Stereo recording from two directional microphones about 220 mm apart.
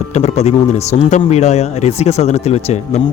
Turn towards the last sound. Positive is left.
turn(degrees=30)  # may be behind; listen again after turning